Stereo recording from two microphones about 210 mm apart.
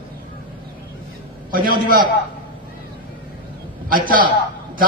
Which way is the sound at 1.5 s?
45° right (ahead or behind).